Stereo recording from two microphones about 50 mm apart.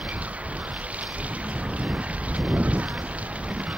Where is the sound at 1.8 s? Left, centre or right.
Right.